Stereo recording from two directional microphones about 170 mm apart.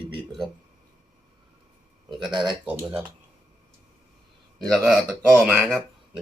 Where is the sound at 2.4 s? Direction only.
Centre (ahead or behind).